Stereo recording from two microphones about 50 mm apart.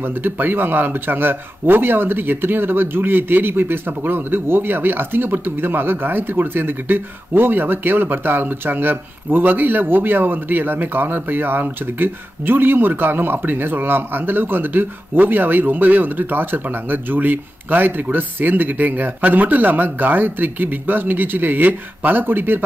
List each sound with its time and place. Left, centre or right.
0.0 s speech: right